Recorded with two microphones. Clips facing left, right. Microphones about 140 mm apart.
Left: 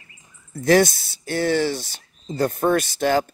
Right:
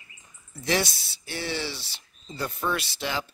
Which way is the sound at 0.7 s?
45° left (ahead or behind).